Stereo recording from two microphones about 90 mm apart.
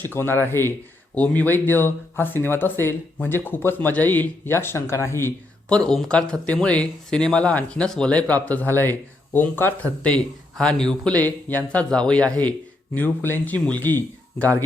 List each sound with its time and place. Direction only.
0.1 s speech: 25° left (ahead or behind)
5.6 s speech: 10° left (ahead or behind)
10.6 s speech: 10° left (ahead or behind)
11.2 s speech: 20° left (ahead or behind)